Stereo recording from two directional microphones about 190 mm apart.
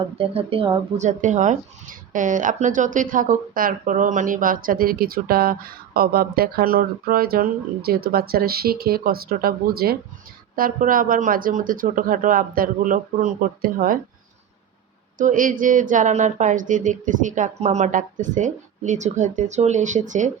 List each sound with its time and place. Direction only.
0.2 s speech: 30° right (ahead or behind); by 14.0 s 45° right (ahead or behind)
15.2 s a woman's voice: 45° right (ahead or behind)